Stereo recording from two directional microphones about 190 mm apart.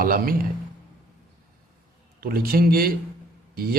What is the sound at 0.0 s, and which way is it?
Speech, 50° right (ahead or behind).